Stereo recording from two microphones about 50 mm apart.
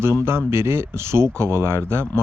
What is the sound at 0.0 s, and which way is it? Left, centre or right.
Speech, right.